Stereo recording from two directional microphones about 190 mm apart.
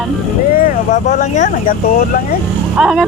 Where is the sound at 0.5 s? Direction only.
45° left (ahead or behind).